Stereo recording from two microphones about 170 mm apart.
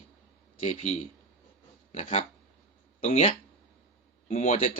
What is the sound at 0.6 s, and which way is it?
Speech, 40° left (ahead or behind).